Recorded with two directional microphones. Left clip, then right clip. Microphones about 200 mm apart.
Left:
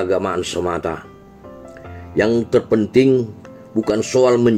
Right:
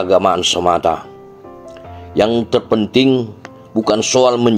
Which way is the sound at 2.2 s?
15° right (ahead or behind).